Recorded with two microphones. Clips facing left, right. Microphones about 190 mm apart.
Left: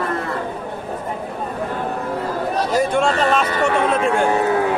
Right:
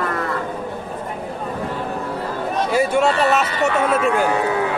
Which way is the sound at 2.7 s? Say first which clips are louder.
Right 1 dB; 5° right (ahead or behind).